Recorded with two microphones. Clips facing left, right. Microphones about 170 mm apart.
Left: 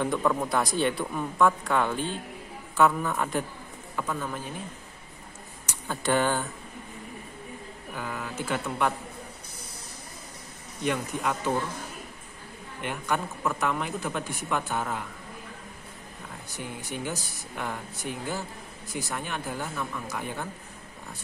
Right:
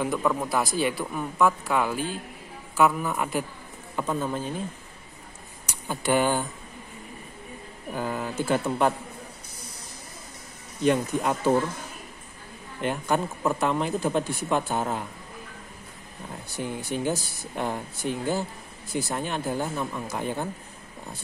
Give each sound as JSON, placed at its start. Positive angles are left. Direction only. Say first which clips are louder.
{"t": 0.0, "sound": "a man's voice", "louder": "even", "side_deg": -5}
{"t": 3.9, "sound": "speech", "louder": "right 4 dB", "side_deg": -25}
{"t": 5.7, "sound": "speech", "louder": "right 2 dB", "side_deg": -10}
{"t": 7.9, "sound": "speech", "louder": "right 6 dB", "side_deg": -30}
{"t": 10.8, "sound": "speech", "louder": "right 6 dB", "side_deg": -30}
{"t": 12.8, "sound": "speech", "louder": "right 4 dB", "side_deg": -30}
{"t": 16.5, "sound": "speech", "louder": "right 6 dB", "side_deg": -30}